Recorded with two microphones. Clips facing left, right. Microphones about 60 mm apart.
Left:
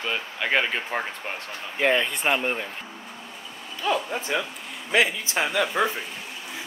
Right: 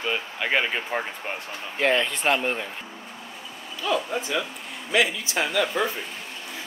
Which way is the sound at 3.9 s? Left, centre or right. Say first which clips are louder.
Even; left.